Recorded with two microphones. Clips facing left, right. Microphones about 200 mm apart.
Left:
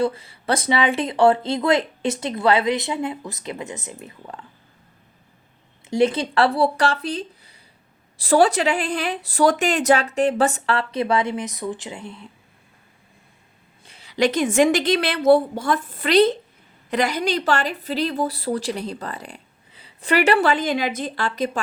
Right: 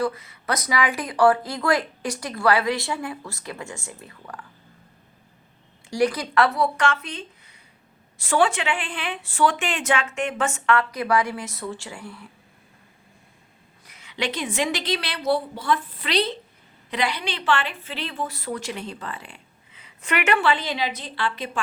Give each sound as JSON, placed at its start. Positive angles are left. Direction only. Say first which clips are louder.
{"t": 0.0, "sound": "speech", "louder": "left 3 dB", "side_deg": 30}
{"t": 5.9, "sound": "a woman's voice", "louder": "left 3 dB", "side_deg": 25}
{"t": 13.8, "sound": "a woman's voice", "louder": "left 9 dB", "side_deg": 30}